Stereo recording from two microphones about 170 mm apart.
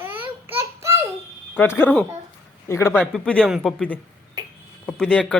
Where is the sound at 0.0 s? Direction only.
10° right (ahead or behind).